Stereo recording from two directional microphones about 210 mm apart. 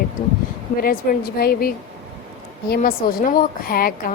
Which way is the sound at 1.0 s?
45° left (ahead or behind).